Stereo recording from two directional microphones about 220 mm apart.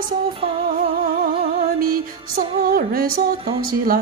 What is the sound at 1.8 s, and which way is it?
Music, 40° right (ahead or behind).